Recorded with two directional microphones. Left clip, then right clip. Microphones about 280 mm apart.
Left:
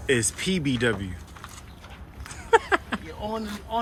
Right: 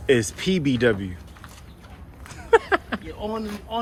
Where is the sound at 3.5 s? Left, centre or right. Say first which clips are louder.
Even; centre.